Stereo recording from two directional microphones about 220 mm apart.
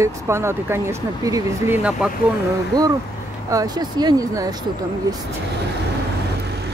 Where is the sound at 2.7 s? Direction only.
15° right (ahead or behind).